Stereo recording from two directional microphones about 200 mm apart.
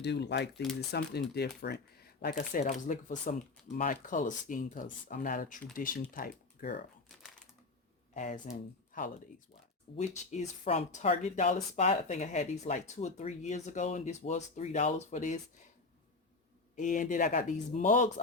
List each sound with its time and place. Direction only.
0.0 s speech: 60° left (ahead or behind)
8.1 s speech: 35° left (ahead or behind)
16.7 s speech: 40° left (ahead or behind)